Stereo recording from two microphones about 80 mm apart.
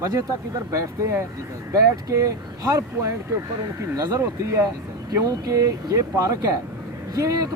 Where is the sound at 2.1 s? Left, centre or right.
Right.